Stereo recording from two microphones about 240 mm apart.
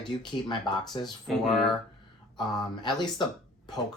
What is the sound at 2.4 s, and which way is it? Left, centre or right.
Speech, centre.